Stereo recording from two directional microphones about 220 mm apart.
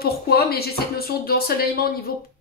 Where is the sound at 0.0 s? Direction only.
45° left (ahead or behind).